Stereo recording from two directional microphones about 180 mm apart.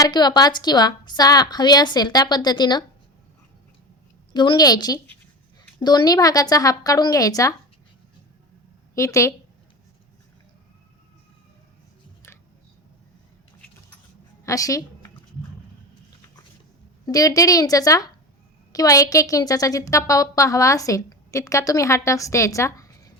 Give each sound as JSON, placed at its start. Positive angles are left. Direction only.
{"t": 0.0, "sound": "a woman's voice", "side_deg": 20}
{"t": 4.4, "sound": "a woman's voice", "side_deg": 25}
{"t": 9.0, "sound": "a woman's voice", "side_deg": 15}
{"t": 14.4, "sound": "a woman's voice", "side_deg": 20}
{"t": 17.1, "sound": "a woman's voice", "side_deg": 20}